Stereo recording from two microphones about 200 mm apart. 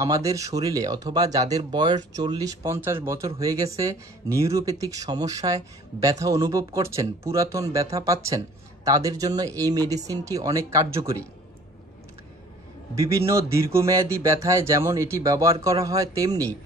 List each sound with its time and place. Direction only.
0.0 s speech: 15° right (ahead or behind)
13.3 s speech: 15° right (ahead or behind)